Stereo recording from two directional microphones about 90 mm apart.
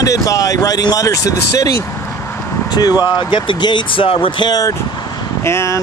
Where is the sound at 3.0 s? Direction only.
55° left (ahead or behind).